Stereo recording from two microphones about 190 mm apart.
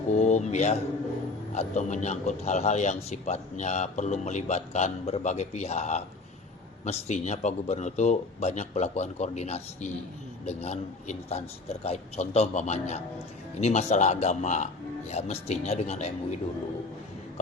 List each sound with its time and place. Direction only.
0.1 s mantra: 40° left (ahead or behind)
1.5 s a man's voice: 40° left (ahead or behind)